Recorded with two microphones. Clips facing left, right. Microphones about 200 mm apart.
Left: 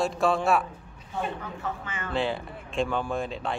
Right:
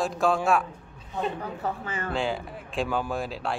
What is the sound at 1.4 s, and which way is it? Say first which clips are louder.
Speech: right 3 dB; 35° right (ahead or behind).